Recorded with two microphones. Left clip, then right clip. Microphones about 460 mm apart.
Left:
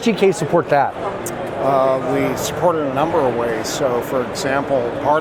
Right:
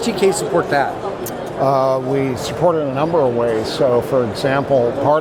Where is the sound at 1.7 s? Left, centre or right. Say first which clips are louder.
Even; right.